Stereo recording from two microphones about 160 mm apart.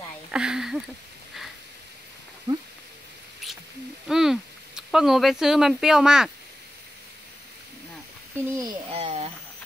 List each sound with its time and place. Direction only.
0.3 s speech: 5° right (ahead or behind)
2.5 s speech: 25° right (ahead or behind)
3.4 s rodents: centre (ahead or behind)
4.1 s speech: 5° right (ahead or behind)
8.4 s speech: 20° right (ahead or behind)
8.9 s speech: 40° right (ahead or behind)